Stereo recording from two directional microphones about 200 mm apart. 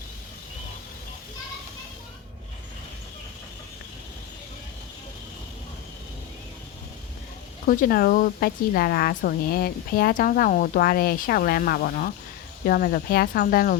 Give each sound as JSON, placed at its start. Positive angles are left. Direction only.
{"t": 7.7, "sound": "speech", "side_deg": 45}